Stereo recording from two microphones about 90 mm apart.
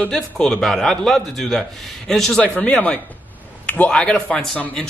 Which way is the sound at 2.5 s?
15° left (ahead or behind).